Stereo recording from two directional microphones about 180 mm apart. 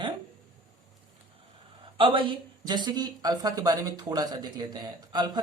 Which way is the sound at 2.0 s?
30° right (ahead or behind).